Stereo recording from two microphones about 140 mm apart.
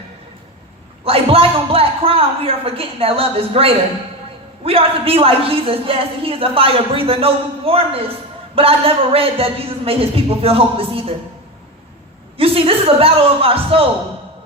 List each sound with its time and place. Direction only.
1.0 s a man's voice: 45° right (ahead or behind)
12.4 s a man's voice: 40° right (ahead or behind)